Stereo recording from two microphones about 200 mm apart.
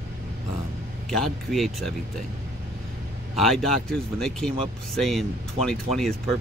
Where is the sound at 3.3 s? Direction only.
Centre (ahead or behind).